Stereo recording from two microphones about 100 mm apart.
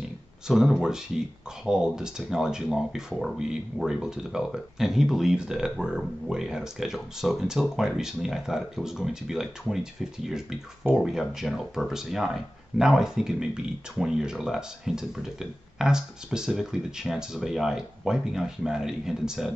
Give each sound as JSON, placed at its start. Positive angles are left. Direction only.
{"t": 0.5, "sound": "speech", "side_deg": 0}